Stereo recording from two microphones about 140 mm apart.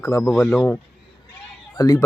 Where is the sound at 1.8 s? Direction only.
25° left (ahead or behind).